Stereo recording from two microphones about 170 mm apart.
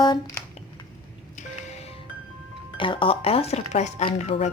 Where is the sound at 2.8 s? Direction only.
30° left (ahead or behind).